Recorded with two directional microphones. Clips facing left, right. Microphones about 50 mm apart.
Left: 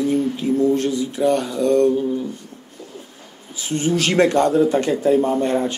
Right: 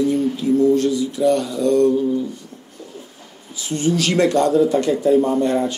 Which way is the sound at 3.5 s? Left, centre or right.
Left.